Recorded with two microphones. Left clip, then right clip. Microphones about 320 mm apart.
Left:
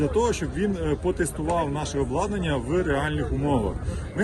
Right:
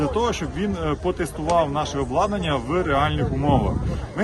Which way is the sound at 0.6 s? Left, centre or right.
Right.